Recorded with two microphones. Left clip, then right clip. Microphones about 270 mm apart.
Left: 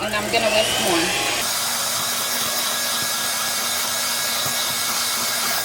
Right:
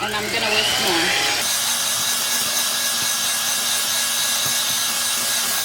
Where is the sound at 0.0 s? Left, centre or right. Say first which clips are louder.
Left 1 dB; centre.